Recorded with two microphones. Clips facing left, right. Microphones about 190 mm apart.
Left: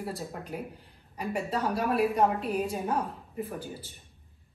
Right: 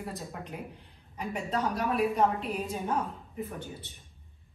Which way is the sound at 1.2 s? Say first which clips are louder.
Left 1 dB; centre (ahead or behind).